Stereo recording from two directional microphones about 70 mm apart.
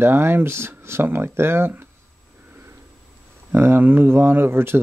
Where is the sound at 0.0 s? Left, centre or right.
Right.